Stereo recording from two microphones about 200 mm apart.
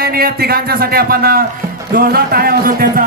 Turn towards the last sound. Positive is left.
turn(degrees=-45)  # may be behind; listen again after turning